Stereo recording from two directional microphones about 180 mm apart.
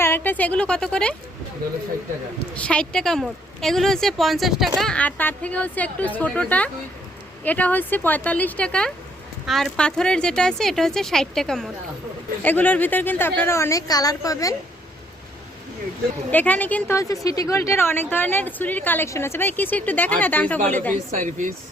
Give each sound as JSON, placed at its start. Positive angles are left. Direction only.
{"t": 0.0, "sound": "a woman's voice", "side_deg": 10}
{"t": 2.6, "sound": "a woman's voice", "side_deg": 5}
{"t": 16.3, "sound": "a woman's voice", "side_deg": 10}
{"t": 21.2, "sound": "a woman's voice", "side_deg": -45}